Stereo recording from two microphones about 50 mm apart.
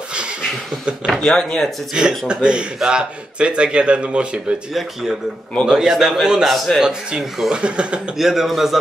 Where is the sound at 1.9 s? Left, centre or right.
Centre.